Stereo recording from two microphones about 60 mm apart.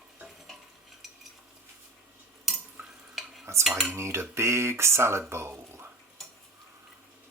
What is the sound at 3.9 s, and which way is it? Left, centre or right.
Speech, right.